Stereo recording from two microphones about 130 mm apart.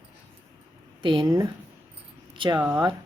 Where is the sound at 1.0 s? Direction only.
40° right (ahead or behind).